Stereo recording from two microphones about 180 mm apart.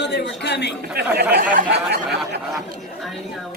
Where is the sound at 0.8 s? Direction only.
60° right (ahead or behind).